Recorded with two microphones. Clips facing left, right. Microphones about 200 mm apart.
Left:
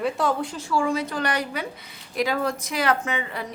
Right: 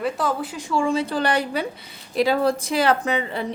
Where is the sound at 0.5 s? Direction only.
20° right (ahead or behind).